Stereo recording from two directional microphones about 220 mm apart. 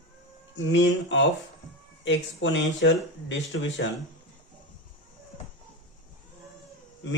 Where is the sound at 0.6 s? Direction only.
55° left (ahead or behind).